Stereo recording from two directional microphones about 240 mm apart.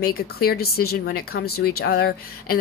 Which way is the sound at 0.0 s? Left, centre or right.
Left.